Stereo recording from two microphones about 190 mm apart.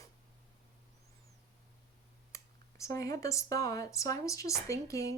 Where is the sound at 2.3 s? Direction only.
15° left (ahead or behind).